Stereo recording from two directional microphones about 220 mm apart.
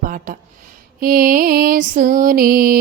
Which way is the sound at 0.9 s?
40° right (ahead or behind).